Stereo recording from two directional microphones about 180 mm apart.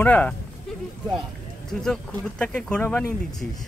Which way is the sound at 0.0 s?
10° left (ahead or behind).